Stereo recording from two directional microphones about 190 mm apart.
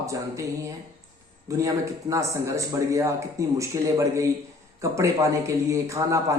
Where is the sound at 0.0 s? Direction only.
15° right (ahead or behind).